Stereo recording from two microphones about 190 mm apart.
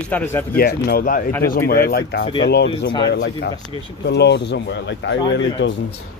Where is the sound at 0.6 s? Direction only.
50° left (ahead or behind).